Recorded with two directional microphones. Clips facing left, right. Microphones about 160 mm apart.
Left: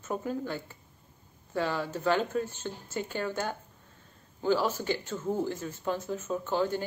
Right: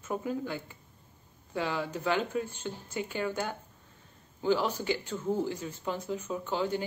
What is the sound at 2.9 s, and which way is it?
Speech, 45° left (ahead or behind).